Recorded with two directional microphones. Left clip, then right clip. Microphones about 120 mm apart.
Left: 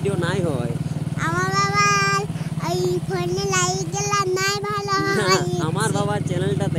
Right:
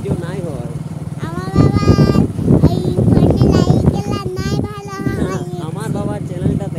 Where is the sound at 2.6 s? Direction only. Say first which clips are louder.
Right 5 dB; 35° left (ahead or behind).